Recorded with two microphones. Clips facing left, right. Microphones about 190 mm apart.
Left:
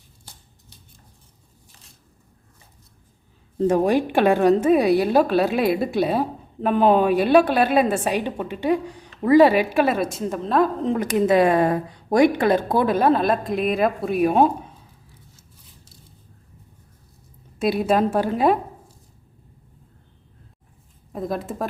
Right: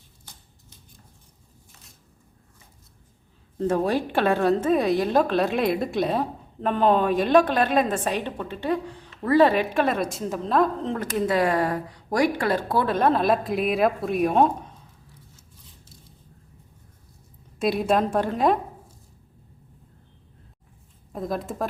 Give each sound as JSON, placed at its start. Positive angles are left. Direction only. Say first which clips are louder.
{"t": 3.6, "sound": "a woman's voice", "louder": "left 5 dB", "side_deg": 15}
{"t": 10.8, "sound": "a woman's voice", "louder": "left 6 dB", "side_deg": 15}
{"t": 17.6, "sound": "a woman's voice", "louder": "left 2 dB", "side_deg": 0}
{"t": 21.1, "sound": "a woman's voice", "louder": "left 2 dB", "side_deg": 0}